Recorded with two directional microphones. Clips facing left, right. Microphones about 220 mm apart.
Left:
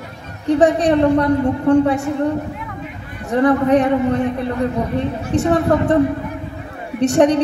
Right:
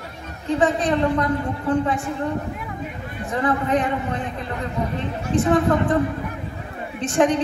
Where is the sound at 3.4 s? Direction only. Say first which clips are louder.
Left 8 dB; 65° left (ahead or behind).